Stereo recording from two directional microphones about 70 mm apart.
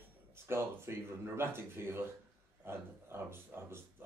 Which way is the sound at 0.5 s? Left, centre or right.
Right.